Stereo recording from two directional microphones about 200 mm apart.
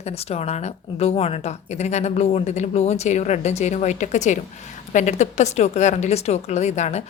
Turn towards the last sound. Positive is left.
turn(degrees=35)  # may be behind; listen again after turning